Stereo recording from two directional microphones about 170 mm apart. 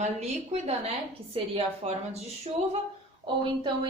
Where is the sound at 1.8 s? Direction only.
35° right (ahead or behind).